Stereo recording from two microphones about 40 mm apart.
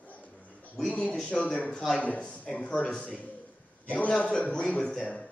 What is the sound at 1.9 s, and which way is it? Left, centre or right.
Speech, left.